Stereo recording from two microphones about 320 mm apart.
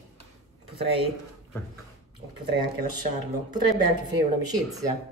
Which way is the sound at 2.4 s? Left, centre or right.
Right.